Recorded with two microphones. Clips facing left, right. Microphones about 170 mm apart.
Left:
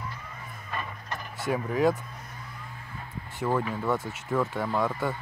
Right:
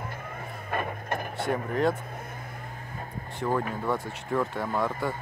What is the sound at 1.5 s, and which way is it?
Speech, centre (ahead or behind).